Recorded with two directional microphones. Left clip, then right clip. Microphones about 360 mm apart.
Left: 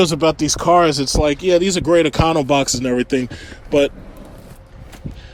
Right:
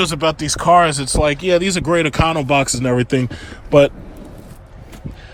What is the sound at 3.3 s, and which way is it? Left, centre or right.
Speech, centre.